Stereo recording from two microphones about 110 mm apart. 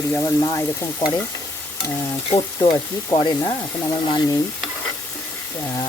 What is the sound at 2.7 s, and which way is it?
Sizzle, 40° left (ahead or behind).